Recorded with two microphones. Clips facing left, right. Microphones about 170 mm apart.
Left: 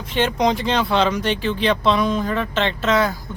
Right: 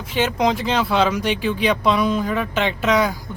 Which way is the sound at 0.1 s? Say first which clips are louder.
Even; 5° right (ahead or behind).